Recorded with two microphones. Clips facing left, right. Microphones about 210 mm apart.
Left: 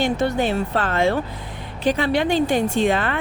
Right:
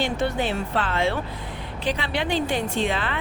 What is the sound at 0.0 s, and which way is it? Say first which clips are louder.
Speech: left 4 dB; 45° left (ahead or behind).